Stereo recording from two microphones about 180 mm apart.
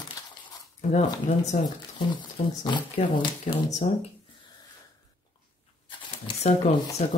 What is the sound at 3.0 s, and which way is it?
Speech, 45° left (ahead or behind).